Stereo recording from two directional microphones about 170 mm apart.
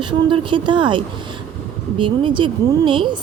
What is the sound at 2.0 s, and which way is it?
A woman's voice, 30° right (ahead or behind).